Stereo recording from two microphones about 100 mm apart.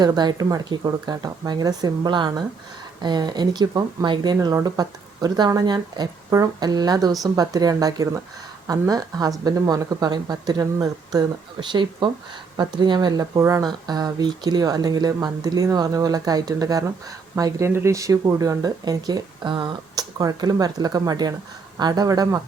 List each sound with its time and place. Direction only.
0.0 s speech: 45° right (ahead or behind)
4.4 s speech: 35° right (ahead or behind)